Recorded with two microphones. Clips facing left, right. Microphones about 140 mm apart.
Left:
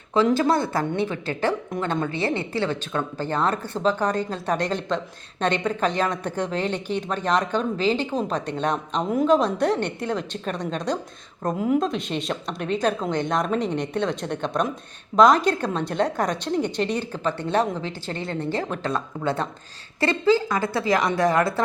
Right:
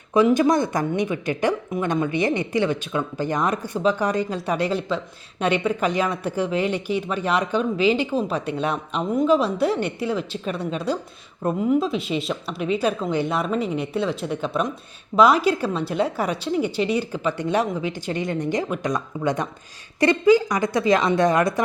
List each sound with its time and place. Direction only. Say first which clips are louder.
0.1 s a woman's voice: right 3 dB; 15° right (ahead or behind)